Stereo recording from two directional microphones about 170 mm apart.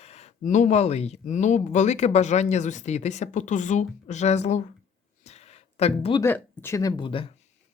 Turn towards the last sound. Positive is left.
turn(degrees=30)  # may be behind; listen again after turning